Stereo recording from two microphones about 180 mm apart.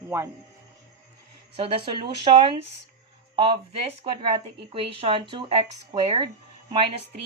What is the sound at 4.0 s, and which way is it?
Speech, 30° right (ahead or behind).